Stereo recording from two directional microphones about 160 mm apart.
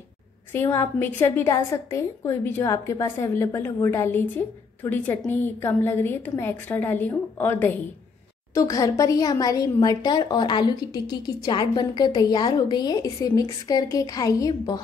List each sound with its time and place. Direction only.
0.5 s a woman's voice: 15° left (ahead or behind)
8.5 s a woman's voice: 20° left (ahead or behind)